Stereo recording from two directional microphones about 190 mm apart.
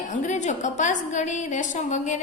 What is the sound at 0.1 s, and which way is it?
A woman's voice, 40° left (ahead or behind).